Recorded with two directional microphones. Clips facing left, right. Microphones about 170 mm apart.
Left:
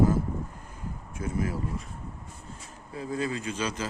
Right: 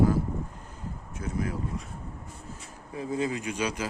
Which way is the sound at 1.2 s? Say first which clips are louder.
Left 1 dB; 5° left (ahead or behind).